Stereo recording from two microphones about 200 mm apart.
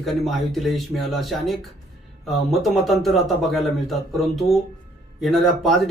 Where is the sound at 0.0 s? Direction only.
Centre (ahead or behind).